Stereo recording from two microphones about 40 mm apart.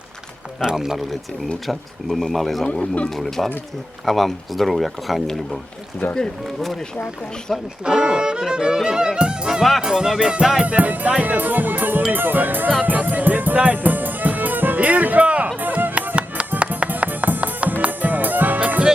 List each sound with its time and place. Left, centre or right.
0.6 s speech: centre
1.6 s speech: centre
2.6 s speech: left
3.2 s speech: centre
7.9 s speech: centre
9.5 s speech: centre
10.6 s speech: right
12.8 s music: right